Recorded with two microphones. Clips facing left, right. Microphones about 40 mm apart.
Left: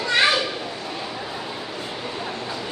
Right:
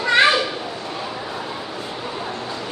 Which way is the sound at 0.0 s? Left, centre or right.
Centre.